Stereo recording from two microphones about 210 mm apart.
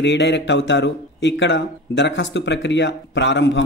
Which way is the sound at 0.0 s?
55° left (ahead or behind).